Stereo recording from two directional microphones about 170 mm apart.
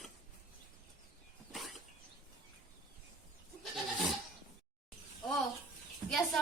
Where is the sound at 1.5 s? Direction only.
Centre (ahead or behind).